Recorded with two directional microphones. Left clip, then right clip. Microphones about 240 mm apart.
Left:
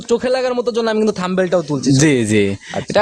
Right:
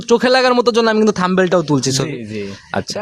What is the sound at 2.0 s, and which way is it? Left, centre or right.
Speech, left.